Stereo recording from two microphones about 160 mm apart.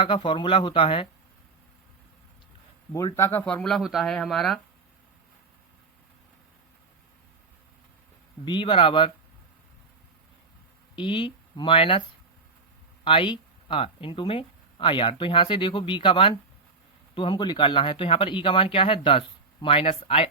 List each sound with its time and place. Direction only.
0.0 s speech: 30° left (ahead or behind)
3.2 s speech: 15° left (ahead or behind)
8.4 s speech: 30° left (ahead or behind)
10.9 s speech: 30° left (ahead or behind)
13.1 s speech: 30° left (ahead or behind)